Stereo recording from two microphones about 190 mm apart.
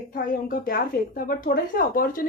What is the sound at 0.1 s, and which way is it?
A woman's voice, 50° left (ahead or behind).